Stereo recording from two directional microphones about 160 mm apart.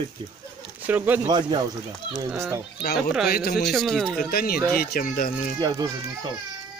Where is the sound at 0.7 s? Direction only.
10° right (ahead or behind).